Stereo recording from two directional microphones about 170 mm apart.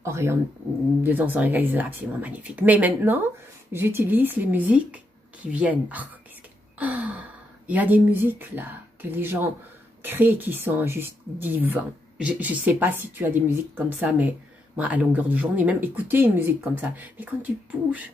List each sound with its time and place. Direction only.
0.0 s speech: 15° right (ahead or behind)